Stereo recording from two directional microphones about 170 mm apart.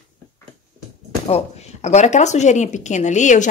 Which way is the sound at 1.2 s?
40° left (ahead or behind).